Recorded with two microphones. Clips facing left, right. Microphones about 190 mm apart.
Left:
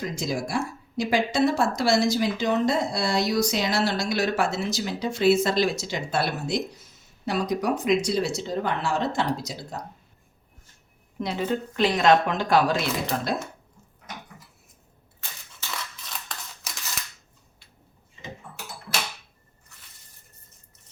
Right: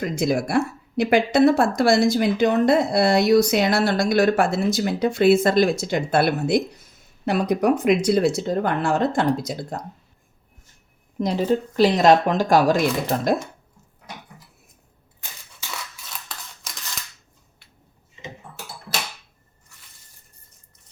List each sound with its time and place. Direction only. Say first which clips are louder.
0.0 s speech: right 7 dB; 60° right (ahead or behind)
11.2 s speech: right 6 dB; 40° right (ahead or behind)
16.3 s scissors: even; 5° right (ahead or behind)